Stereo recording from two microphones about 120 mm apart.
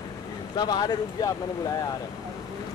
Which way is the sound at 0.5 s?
35° left (ahead or behind).